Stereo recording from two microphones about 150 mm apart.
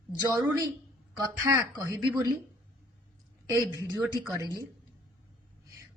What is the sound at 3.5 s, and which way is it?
Speech, 20° right (ahead or behind).